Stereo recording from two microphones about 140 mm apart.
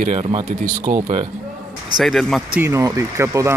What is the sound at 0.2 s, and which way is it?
Speech, 40° right (ahead or behind).